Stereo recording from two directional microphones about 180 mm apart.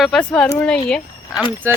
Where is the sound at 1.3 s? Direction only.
5° right (ahead or behind).